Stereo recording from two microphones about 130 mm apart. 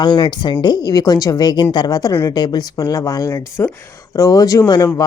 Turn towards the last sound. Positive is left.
turn(degrees=30)  # may be behind; listen again after turning